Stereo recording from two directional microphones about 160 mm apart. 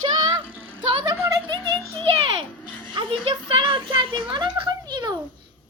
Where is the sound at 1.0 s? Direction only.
20° right (ahead or behind).